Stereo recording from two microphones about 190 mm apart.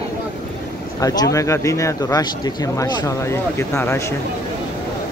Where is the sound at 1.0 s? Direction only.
20° left (ahead or behind).